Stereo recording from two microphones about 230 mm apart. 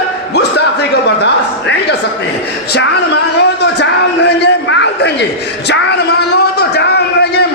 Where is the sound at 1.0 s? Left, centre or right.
Left.